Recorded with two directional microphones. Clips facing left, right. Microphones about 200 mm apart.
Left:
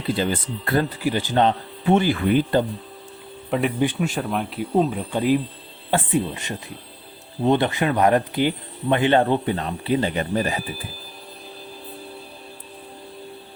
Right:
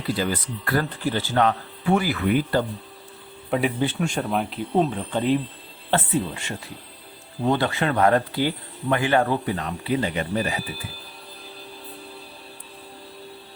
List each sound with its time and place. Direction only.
0.1 s speech: 25° left (ahead or behind)
0.9 s speech: 10° left (ahead or behind)
3.5 s speech: centre (ahead or behind); by 10.6 s 35° left (ahead or behind)